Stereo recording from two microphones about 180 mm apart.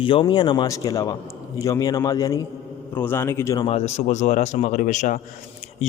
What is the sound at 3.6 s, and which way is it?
A man's voice, 35° left (ahead or behind).